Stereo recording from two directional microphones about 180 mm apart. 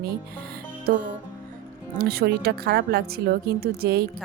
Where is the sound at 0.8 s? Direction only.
45° right (ahead or behind).